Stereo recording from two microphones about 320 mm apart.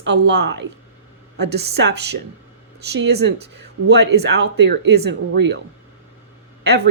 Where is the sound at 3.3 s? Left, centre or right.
Right.